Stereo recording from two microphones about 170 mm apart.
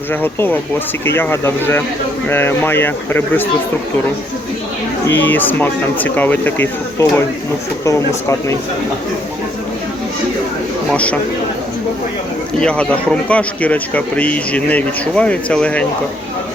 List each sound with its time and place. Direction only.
0.1 s a man's voice: 10° left (ahead or behind)
5.0 s a man's voice: 10° left (ahead or behind)
10.9 s a man's voice: 5° left (ahead or behind)
12.5 s a man's voice: 5° left (ahead or behind)